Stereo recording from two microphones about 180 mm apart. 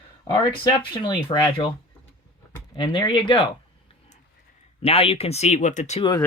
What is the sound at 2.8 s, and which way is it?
Speech, 25° left (ahead or behind).